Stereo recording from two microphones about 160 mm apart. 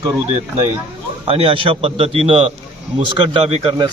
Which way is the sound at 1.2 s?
35° right (ahead or behind).